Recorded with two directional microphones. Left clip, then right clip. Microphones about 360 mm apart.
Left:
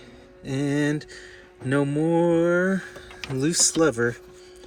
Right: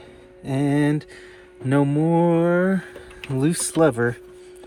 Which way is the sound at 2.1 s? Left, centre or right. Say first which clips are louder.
Even; centre.